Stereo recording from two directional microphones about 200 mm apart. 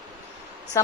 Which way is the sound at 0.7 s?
15° left (ahead or behind).